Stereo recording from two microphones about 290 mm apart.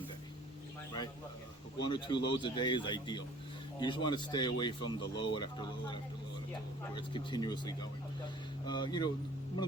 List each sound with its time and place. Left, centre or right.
1.8 s speech: centre